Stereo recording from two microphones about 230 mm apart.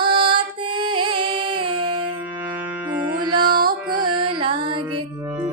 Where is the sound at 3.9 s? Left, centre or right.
Centre.